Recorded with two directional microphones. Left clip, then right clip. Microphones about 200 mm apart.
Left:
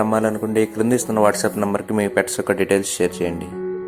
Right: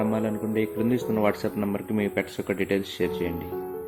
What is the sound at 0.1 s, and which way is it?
Speech, 35° left (ahead or behind).